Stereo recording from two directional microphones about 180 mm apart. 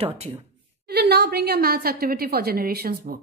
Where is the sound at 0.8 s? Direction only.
65° right (ahead or behind).